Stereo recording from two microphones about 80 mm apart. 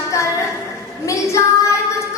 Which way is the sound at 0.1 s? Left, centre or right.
Left.